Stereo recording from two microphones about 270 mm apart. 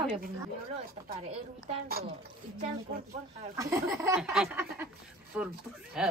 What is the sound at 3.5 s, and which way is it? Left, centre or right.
A woman's voice, centre.